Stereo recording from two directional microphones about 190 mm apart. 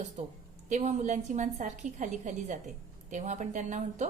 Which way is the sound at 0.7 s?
40° right (ahead or behind).